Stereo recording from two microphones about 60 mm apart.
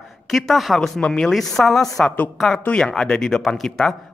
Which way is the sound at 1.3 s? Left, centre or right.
Centre.